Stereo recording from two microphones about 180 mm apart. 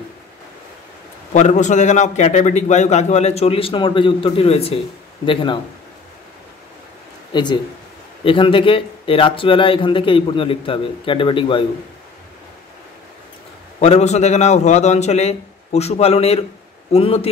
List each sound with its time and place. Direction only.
1.3 s a man's voice: 40° left (ahead or behind)
7.3 s speech: 25° left (ahead or behind)
13.7 s a man's voice: 40° left (ahead or behind)